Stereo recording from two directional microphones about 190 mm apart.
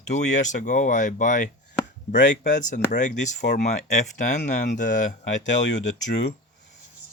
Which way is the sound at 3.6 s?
35° left (ahead or behind).